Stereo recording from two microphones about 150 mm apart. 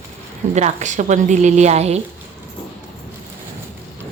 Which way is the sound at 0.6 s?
50° right (ahead or behind).